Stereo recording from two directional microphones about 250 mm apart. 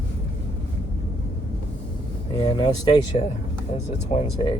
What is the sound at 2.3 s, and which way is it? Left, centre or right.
Speech, centre.